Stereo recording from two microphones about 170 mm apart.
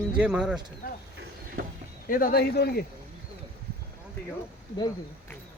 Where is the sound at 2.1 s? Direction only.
55° left (ahead or behind).